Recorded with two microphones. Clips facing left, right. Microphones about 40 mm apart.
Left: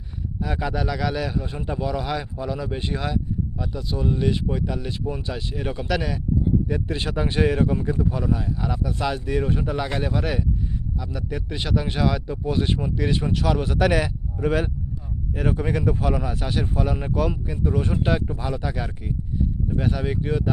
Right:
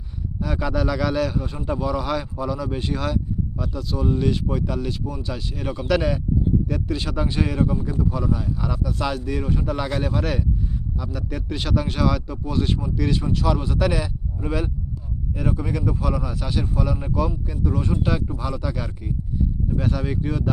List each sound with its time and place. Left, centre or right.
0.4 s speech: centre
5.0 s speech: left
5.3 s speech: centre
5.9 s speech: centre
6.8 s speech: left
8.4 s speech: centre
9.1 s speech: left
10.0 s speech: centre
12.3 s speech: left